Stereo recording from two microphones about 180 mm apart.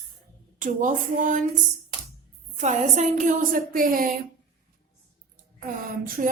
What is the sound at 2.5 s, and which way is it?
A woman's voice, 40° right (ahead or behind).